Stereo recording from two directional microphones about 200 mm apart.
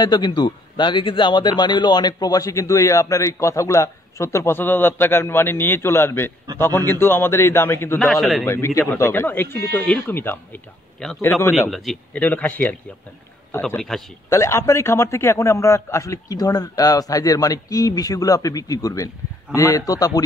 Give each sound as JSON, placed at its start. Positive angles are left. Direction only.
{"t": 0.0, "sound": "speech", "side_deg": 20}
{"t": 8.0, "sound": "a man's voice", "side_deg": 0}
{"t": 8.5, "sound": "a man's voice", "side_deg": 15}
{"t": 14.3, "sound": "speech", "side_deg": 15}